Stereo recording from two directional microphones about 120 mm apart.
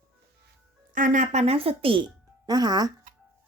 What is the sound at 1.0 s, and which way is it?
Speech, 85° right.